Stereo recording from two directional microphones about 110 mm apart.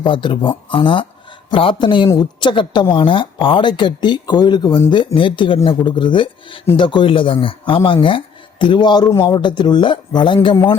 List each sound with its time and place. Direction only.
0.0 s speech: 45° left (ahead or behind)
10.5 s a man's voice: 25° left (ahead or behind)